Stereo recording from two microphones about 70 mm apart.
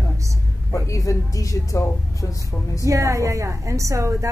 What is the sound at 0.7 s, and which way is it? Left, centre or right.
Speech, left.